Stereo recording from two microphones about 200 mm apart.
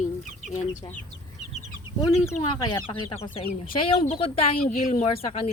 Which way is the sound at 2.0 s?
15° left (ahead or behind).